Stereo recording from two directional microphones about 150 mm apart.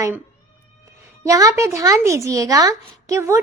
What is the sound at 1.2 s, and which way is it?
A woman's voice, 20° right (ahead or behind).